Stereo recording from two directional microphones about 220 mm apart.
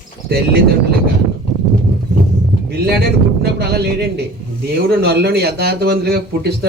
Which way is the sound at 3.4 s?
45° right (ahead or behind).